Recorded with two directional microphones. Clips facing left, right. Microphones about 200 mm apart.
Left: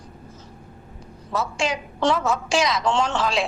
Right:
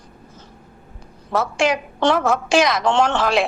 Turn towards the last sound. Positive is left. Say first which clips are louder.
# right 5 dB
turn(degrees=-65)  # may be behind; listen again after turning